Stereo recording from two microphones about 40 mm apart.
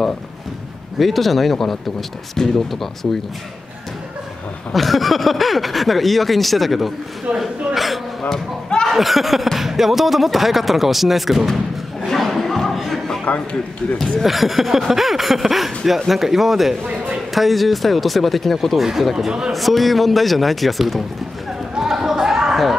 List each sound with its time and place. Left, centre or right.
0.9 s speech: centre
4.7 s speech: centre
7.3 s hiccup: centre
8.9 s speech: centre
12.1 s a sound: centre
13.2 s a man's voice: left
14.2 s speech: centre
18.8 s a man's voice: centre
19.5 s speech: centre
21.7 s a sound: centre